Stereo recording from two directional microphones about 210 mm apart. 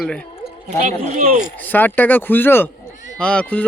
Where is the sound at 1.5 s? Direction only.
10° left (ahead or behind).